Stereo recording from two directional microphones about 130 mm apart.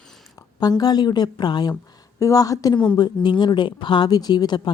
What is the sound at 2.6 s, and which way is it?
Speech, 35° left (ahead or behind).